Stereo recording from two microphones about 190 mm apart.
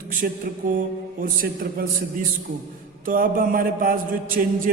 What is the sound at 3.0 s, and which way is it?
Mantra, 45° right (ahead or behind).